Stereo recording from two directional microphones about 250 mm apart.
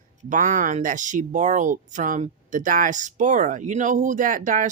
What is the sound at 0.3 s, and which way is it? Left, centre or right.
Speech, right.